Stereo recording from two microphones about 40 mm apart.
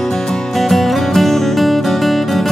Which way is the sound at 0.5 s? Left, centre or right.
Centre.